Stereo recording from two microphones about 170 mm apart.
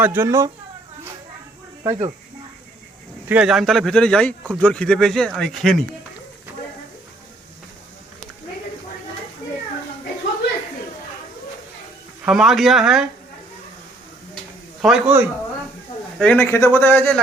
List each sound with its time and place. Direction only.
0.0 s speech: 15° right (ahead or behind)
1.9 s speech: 35° right (ahead or behind)
3.2 s speech: 5° right (ahead or behind)
12.2 s speech: 5° right (ahead or behind)
14.8 s speech: 5° right (ahead or behind)
16.1 s a man's voice: 5° left (ahead or behind)